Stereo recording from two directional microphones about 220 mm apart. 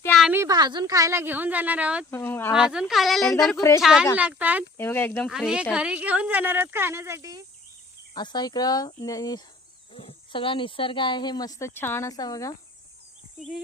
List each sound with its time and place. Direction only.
0.1 s a woman's voice: 5° right (ahead or behind)
2.0 s speech: 10° left (ahead or behind)
2.5 s speech: 5° right (ahead or behind)
4.8 s speech: 10° left (ahead or behind)
5.3 s speech: 5° right (ahead or behind)
8.1 s speech: 20° left (ahead or behind)